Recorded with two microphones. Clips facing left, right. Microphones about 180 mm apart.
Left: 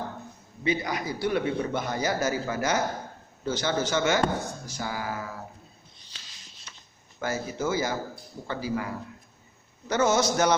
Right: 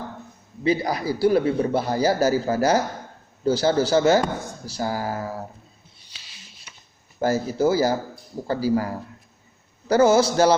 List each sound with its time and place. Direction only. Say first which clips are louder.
0.6 s a man's voice: right 6 dB; 35° right (ahead or behind)
6.1 s a sound: right 3 dB; 10° right (ahead or behind)
7.2 s a man's voice: right 9 dB; 35° right (ahead or behind)